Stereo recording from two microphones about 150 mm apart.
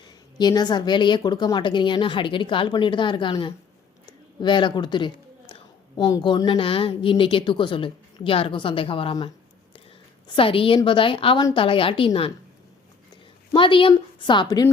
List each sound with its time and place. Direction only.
0.3 s a woman's voice: 25° left (ahead or behind)
13.5 s a woman's voice: 35° left (ahead or behind)